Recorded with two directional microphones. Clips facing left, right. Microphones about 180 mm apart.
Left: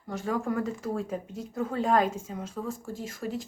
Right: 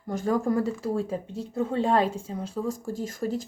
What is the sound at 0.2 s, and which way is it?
Speech, 40° right (ahead or behind).